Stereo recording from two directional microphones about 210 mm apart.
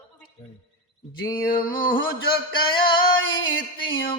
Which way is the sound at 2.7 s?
20° left (ahead or behind).